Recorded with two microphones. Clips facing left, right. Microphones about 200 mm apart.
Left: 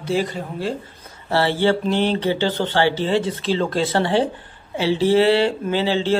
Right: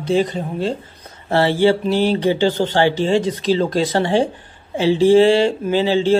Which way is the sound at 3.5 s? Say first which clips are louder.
Right 1 dB; 40° right (ahead or behind).